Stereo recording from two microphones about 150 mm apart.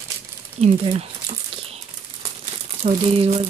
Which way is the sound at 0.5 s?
45° right (ahead or behind).